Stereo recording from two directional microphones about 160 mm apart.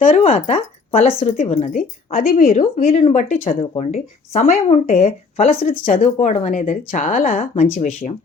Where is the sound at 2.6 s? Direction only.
45° left (ahead or behind).